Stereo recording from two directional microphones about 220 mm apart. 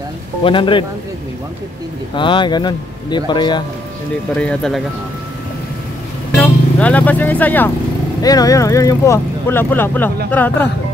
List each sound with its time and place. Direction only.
0.4 s speech: 25° left (ahead or behind)
2.1 s speech: 20° left (ahead or behind)
4.4 s speech: 5° left (ahead or behind)
6.3 s speech: 5° left (ahead or behind)